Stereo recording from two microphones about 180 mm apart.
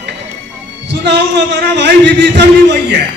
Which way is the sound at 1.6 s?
70° right (ahead or behind).